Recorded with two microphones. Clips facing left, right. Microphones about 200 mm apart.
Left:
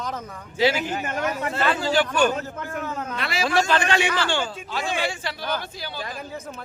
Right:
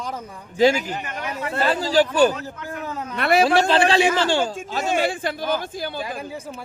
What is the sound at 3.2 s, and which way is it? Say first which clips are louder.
Speech: right 13 dB; 60° right (ahead or behind).